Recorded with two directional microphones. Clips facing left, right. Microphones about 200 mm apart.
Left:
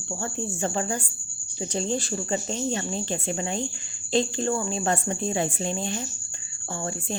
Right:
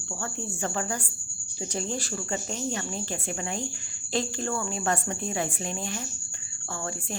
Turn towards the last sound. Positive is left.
turn(degrees=25)  # may be behind; listen again after turning